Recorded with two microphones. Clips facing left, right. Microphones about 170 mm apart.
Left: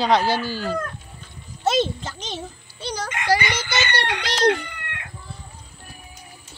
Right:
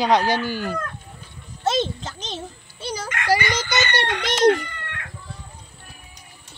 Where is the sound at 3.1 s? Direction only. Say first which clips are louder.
Even; 15° left (ahead or behind).